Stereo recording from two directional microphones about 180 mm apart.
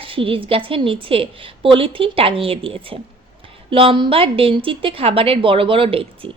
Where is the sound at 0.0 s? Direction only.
30° right (ahead or behind).